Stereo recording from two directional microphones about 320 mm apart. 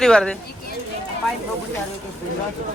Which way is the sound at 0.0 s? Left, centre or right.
Centre.